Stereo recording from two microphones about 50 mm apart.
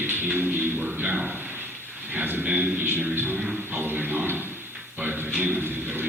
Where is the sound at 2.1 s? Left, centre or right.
Right.